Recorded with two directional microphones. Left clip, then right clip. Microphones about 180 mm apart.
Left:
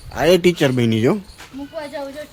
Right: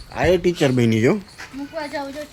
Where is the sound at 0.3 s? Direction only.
55° left (ahead or behind).